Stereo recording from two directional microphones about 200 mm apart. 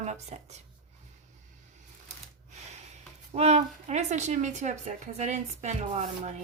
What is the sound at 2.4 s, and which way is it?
Speech, 35° right (ahead or behind).